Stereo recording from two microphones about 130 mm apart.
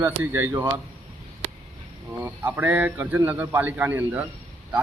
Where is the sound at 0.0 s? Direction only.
15° right (ahead or behind).